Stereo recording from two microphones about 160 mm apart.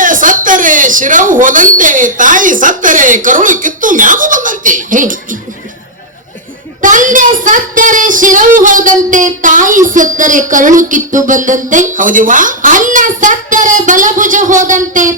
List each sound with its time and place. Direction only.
0.0 s a woman's voice: 55° right (ahead or behind)
6.8 s speech: 55° right (ahead or behind)